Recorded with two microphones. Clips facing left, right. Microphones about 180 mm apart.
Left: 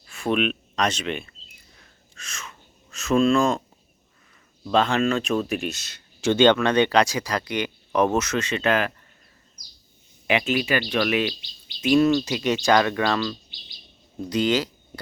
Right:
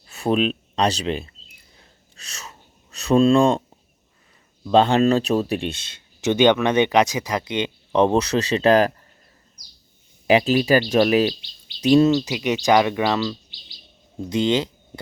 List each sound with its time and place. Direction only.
0.1 s speech: 35° right (ahead or behind)
1.8 s a sound: 35° right (ahead or behind)
4.7 s speech: 30° right (ahead or behind)
10.2 s speech: 35° right (ahead or behind)